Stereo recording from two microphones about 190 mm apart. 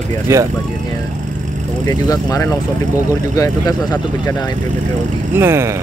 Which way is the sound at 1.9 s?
20° left (ahead or behind).